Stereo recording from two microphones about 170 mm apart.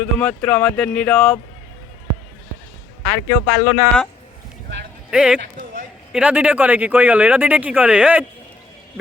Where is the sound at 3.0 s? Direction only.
10° left (ahead or behind).